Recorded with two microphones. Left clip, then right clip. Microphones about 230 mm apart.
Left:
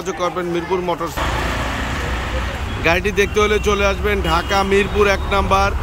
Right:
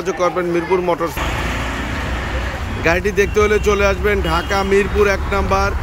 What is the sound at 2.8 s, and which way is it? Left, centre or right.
Speech, centre.